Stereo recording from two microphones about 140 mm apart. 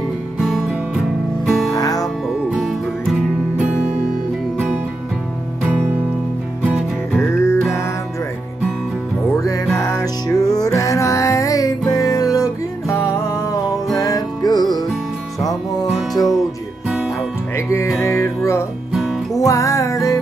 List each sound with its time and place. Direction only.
0.4 s music: centre (ahead or behind)
1.7 s music: 25° left (ahead or behind)
2.2 s music: centre (ahead or behind)
5.6 s music: 10° right (ahead or behind)
7.3 s music: 20° left (ahead or behind)
9.3 s music: 25° left (ahead or behind)
16.1 s music: centre (ahead or behind)
17.6 s music: 20° left (ahead or behind)